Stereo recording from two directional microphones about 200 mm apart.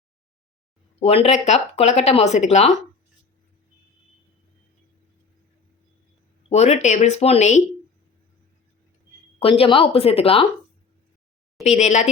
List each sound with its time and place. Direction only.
0.9 s speech: 30° left (ahead or behind)
6.5 s speech: 35° left (ahead or behind)
9.4 s speech: 25° left (ahead or behind)
11.6 s speech: 35° left (ahead or behind)